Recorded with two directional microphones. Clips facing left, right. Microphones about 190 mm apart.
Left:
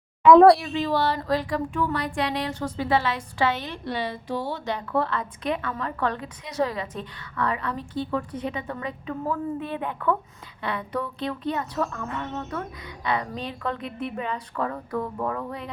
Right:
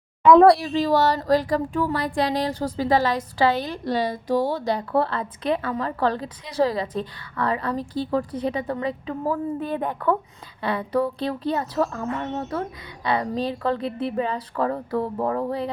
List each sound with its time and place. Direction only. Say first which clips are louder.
0.3 s speech: even; centre (ahead or behind)
0.6 s speech: right 4 dB; 35° right (ahead or behind)